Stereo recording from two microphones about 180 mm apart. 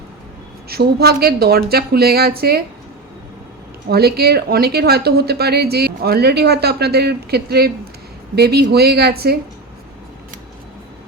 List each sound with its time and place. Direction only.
0.7 s speech: 65° right (ahead or behind)
3.8 s speech: 60° right (ahead or behind)